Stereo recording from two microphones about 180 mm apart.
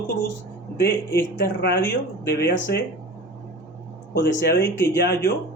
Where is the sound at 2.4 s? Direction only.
75° left (ahead or behind).